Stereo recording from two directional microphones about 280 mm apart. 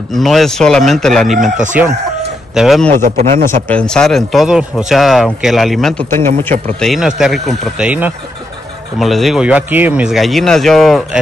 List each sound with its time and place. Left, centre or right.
0.1 s speech: centre
3.0 s a man's voice: right
3.6 s speech: centre